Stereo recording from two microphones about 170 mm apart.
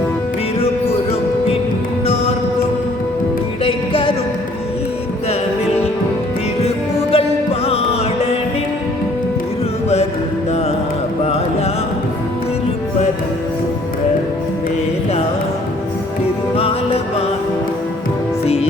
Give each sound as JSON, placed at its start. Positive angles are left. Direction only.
{"t": 3.6, "sound": "music", "side_deg": 35}
{"t": 7.1, "sound": "music", "side_deg": 35}
{"t": 16.6, "sound": "music", "side_deg": 35}
{"t": 18.4, "sound": "music", "side_deg": 35}